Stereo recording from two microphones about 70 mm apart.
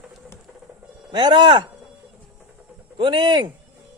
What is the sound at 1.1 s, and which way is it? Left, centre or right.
Speech, right.